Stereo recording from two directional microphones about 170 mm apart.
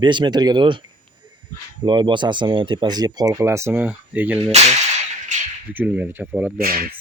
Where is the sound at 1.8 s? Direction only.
25° right (ahead or behind); by 4.4 s 10° right (ahead or behind).